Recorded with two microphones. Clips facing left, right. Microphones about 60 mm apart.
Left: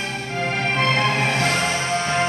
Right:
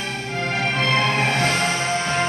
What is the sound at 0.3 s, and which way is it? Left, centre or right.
Music, centre.